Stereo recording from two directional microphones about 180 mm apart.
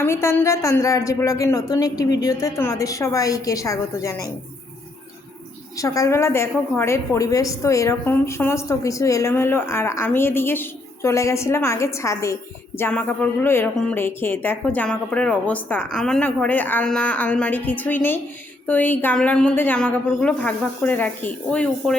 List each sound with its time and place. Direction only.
0.0 s a woman's voice: 15° left (ahead or behind)
5.7 s a woman's voice: 20° left (ahead or behind)